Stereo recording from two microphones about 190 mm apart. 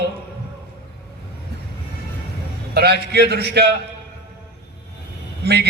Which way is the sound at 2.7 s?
60° right (ahead or behind).